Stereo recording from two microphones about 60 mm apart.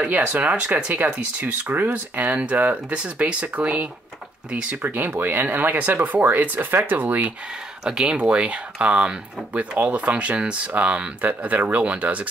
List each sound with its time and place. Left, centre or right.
0.0 s speech: right
4.8 s speech: right
7.8 s speech: centre